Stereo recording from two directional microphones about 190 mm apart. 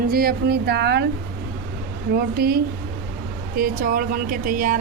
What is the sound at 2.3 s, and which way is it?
Speech, 55° right (ahead or behind).